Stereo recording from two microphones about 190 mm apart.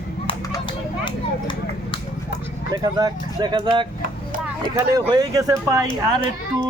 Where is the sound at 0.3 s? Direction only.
20° left (ahead or behind).